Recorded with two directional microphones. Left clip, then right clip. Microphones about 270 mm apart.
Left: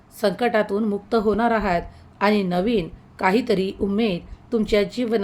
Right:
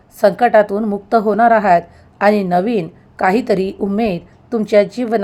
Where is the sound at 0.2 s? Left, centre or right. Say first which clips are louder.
Right 10 dB; centre.